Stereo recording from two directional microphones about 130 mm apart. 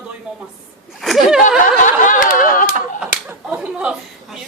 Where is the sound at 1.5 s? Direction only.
90° left.